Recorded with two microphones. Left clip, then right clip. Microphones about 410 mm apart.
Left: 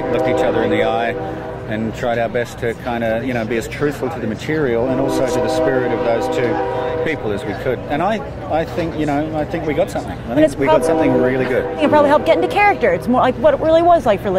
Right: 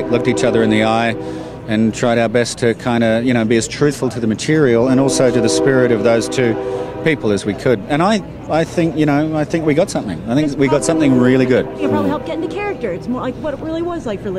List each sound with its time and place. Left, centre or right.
0.1 s a man's voice: right
11.8 s speech: centre